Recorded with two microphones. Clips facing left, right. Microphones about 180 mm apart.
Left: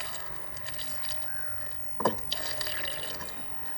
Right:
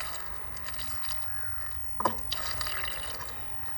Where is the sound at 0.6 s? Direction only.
30° left (ahead or behind).